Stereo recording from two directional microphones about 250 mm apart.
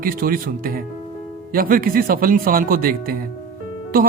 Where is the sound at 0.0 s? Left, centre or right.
Right.